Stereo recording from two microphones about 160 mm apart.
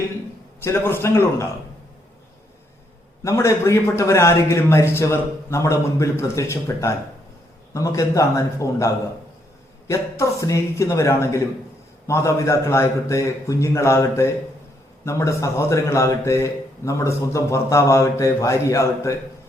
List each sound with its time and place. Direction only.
0.6 s a man's voice: 15° left (ahead or behind)
3.2 s a man's voice: 15° left (ahead or behind)